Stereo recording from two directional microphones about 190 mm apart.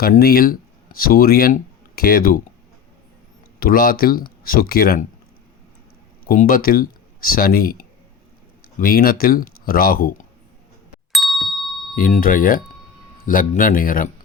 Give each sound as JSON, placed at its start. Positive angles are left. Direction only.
{"t": 0.0, "sound": "speech", "side_deg": 50}
{"t": 3.6, "sound": "speech", "side_deg": 50}
{"t": 6.2, "sound": "speech", "side_deg": 50}
{"t": 11.1, "sound": "ding", "side_deg": 0}
{"t": 11.9, "sound": "speech", "side_deg": 45}